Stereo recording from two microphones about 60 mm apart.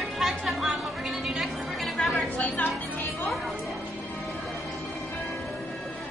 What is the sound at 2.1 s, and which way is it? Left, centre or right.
Chatter, left.